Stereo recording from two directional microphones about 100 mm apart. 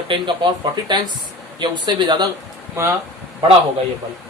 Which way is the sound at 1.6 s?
45° right (ahead or behind).